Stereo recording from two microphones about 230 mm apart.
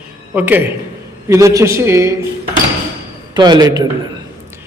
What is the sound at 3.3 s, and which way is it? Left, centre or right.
Speech, centre.